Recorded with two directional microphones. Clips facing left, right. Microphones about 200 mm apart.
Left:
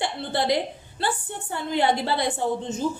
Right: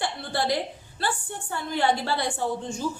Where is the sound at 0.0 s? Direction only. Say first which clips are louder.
Left 2 dB; 20° left (ahead or behind).